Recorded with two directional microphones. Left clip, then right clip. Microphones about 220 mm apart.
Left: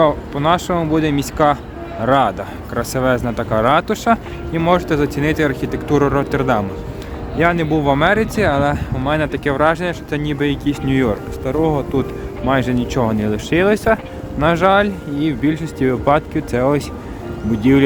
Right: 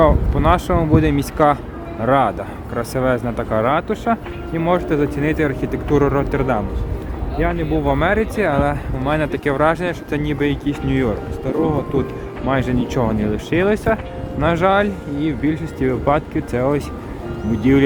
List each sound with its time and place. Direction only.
0.0 s speech: 10° left (ahead or behind)
7.3 s speech: 25° left (ahead or behind)
7.9 s speech: 15° left (ahead or behind)